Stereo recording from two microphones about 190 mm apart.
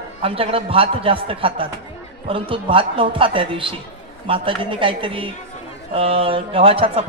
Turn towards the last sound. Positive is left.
turn(degrees=-30)  # may be behind; listen again after turning